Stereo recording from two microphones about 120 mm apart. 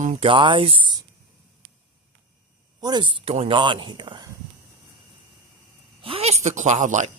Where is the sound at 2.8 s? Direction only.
40° right (ahead or behind).